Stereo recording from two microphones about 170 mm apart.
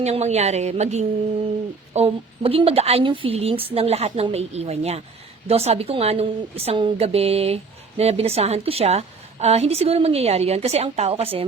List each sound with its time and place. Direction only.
0.0 s a woman's voice: 40° right (ahead or behind)